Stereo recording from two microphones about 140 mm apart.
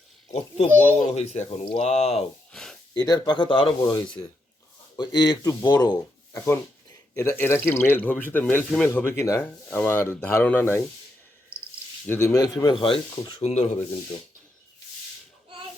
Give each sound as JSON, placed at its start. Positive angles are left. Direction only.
{"t": 0.3, "sound": "speech", "side_deg": 55}
{"t": 0.7, "sound": "speech", "side_deg": 10}
{"t": 0.9, "sound": "a child's voice", "side_deg": 55}
{"t": 1.5, "sound": "speech", "side_deg": 40}
{"t": 2.5, "sound": "gasp", "side_deg": 5}
{"t": 2.9, "sound": "speech", "side_deg": 30}
{"t": 4.9, "sound": "speech", "side_deg": 30}
{"t": 12.0, "sound": "speech", "side_deg": 15}
{"t": 13.4, "sound": "speech", "side_deg": 50}